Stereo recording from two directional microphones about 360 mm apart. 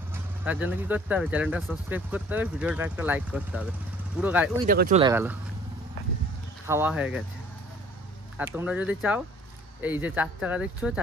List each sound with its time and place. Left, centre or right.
0.1 s speech: centre
4.6 s speech: right
5.1 s speech: centre
6.7 s speech: centre
8.4 s speech: centre